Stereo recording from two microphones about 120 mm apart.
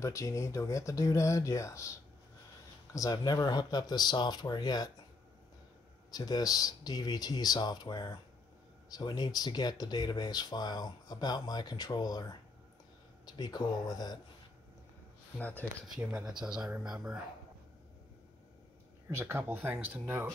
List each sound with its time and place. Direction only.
0.0 s speech: 25° left (ahead or behind)
6.1 s speech: 35° left (ahead or behind)
15.3 s speech: 15° left (ahead or behind)
16.3 s speech: 5° right (ahead or behind)
19.0 s speech: 20° right (ahead or behind)